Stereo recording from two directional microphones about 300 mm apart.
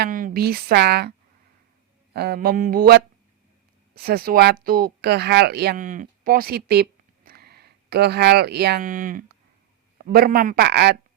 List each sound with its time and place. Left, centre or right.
0.0 s a woman's voice: right
2.1 s a man's voice: right